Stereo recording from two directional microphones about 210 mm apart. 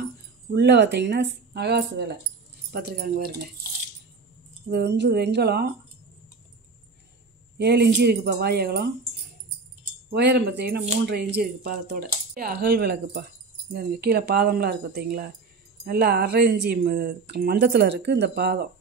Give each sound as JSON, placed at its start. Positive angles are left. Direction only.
{"t": 0.0, "sound": "speech", "side_deg": -55}
{"t": 4.6, "sound": "speech", "side_deg": -55}
{"t": 7.5, "sound": "speech", "side_deg": -55}
{"t": 10.0, "sound": "speech", "side_deg": -50}